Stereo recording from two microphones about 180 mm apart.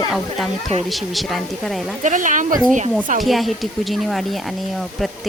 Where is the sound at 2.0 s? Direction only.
45° right (ahead or behind).